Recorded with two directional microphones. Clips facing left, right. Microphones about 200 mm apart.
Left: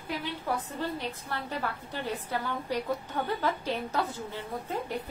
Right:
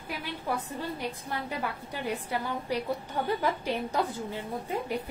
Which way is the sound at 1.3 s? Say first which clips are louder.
Left 1 dB; 10° right (ahead or behind).